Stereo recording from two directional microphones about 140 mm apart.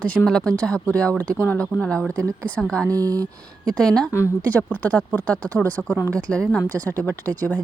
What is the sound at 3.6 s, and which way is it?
Speech, 5° left (ahead or behind).